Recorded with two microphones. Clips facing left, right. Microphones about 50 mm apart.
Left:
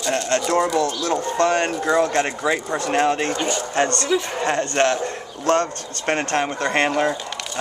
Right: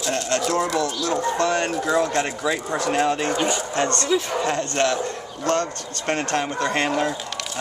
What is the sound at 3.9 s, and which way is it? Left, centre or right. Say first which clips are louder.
Speech: even; centre.